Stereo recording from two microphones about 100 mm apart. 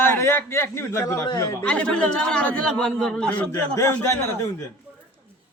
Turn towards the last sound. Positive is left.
turn(degrees=30)  # may be behind; listen again after turning